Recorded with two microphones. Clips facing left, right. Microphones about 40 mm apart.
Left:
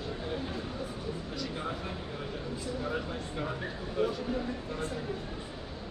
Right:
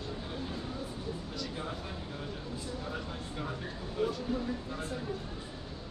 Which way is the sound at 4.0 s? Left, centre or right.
Centre.